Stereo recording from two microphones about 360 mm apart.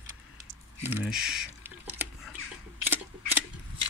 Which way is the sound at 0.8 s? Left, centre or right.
Centre.